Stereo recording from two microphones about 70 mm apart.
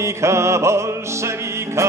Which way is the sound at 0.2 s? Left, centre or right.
Right.